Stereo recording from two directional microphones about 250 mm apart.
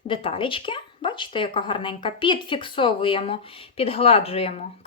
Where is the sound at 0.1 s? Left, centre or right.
Left.